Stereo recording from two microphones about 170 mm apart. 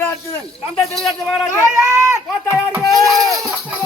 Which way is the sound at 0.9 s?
Centre (ahead or behind).